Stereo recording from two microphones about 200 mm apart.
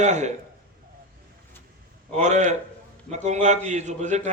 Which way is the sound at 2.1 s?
35° right (ahead or behind).